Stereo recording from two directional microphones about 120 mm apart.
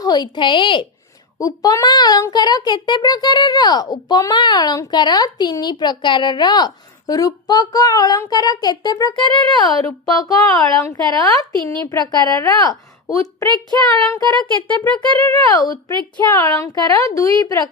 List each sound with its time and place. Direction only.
0.0 s a child's voice: 35° left (ahead or behind)
1.4 s a child's voice: 30° left (ahead or behind)
9.8 s a child's voice: 30° left (ahead or behind)
13.5 s child singing: 40° right (ahead or behind)
13.9 s speech: 30° left (ahead or behind)
15.3 s a child's voice: 30° left (ahead or behind)